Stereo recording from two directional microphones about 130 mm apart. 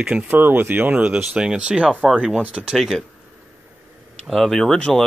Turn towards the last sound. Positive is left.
turn(degrees=5)  # may be behind; listen again after turning